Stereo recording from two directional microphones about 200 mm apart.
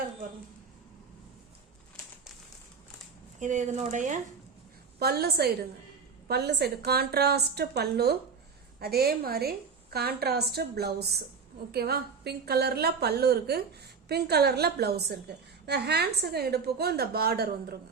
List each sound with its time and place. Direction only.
3.4 s speech: 40° right (ahead or behind)
4.9 s a woman's voice: 50° right (ahead or behind)